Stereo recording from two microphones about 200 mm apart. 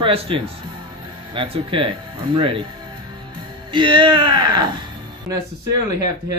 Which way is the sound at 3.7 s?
25° right (ahead or behind).